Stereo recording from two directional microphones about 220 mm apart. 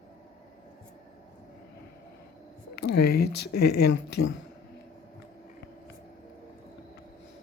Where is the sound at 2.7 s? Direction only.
45° left (ahead or behind).